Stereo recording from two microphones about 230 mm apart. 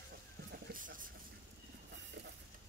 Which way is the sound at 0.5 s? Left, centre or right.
Right.